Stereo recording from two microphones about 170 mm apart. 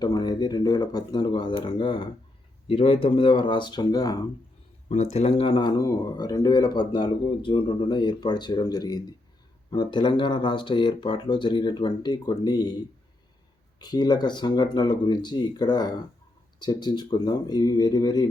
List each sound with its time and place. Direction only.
0.0 s speech: 25° left (ahead or behind)
4.9 s speech: 40° left (ahead or behind); by 12.7 s 25° left (ahead or behind)
13.7 s speech: 25° left (ahead or behind)